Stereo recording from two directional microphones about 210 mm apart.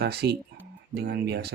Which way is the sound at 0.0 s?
50° right (ahead or behind).